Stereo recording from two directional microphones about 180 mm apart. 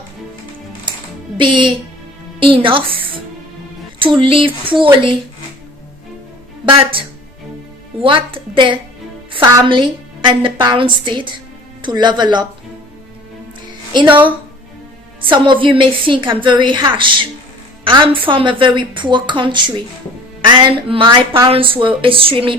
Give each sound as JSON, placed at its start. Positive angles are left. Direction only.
{"t": 1.4, "sound": "a woman's voice", "side_deg": -25}
{"t": 4.2, "sound": "a woman's voice", "side_deg": -30}
{"t": 6.7, "sound": "a woman's voice", "side_deg": -30}
{"t": 8.0, "sound": "a woman's voice", "side_deg": -30}
{"t": 13.9, "sound": "a woman's voice", "side_deg": -25}
{"t": 15.3, "sound": "a woman's voice", "side_deg": -25}